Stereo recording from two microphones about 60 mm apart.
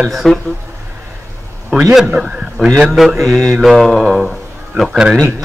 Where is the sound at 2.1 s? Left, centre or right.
Centre.